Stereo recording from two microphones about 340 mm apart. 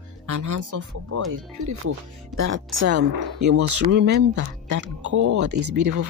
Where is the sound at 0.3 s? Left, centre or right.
Right.